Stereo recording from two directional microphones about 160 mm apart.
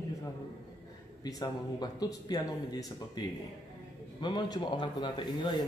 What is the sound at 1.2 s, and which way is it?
Speech, 25° left (ahead or behind).